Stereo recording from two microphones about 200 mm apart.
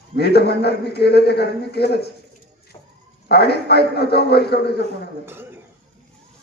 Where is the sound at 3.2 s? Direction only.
55° left (ahead or behind).